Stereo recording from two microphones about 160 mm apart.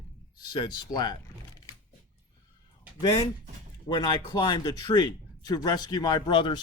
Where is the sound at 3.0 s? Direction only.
30° left (ahead or behind).